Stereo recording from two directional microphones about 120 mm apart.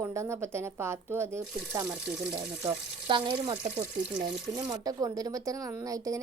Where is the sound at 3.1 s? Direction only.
45° right (ahead or behind).